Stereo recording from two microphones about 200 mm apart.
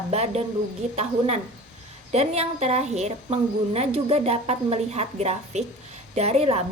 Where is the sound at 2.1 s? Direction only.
30° right (ahead or behind).